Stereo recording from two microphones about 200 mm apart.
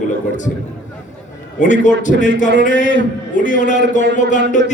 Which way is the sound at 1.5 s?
40° left (ahead or behind).